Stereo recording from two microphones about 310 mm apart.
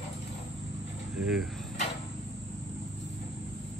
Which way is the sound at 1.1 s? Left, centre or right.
Centre.